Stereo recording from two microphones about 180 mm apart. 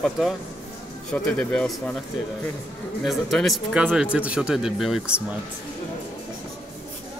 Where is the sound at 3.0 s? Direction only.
Centre (ahead or behind).